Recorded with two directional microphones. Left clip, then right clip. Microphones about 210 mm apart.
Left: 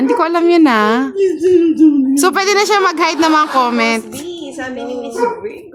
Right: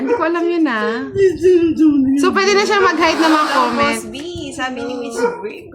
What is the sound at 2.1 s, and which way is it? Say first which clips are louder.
Speech: left 1 dB; 55° left (ahead or behind).